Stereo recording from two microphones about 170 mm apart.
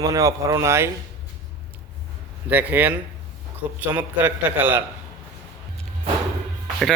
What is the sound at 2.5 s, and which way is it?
A man's voice, 10° right (ahead or behind).